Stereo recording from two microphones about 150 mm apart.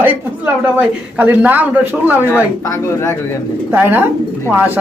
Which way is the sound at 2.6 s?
20° left (ahead or behind).